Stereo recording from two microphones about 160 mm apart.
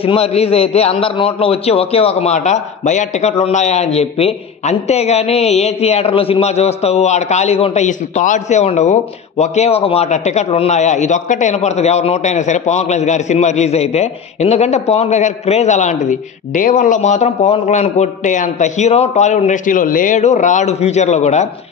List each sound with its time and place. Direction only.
0.0 s a man's voice: 40° left (ahead or behind)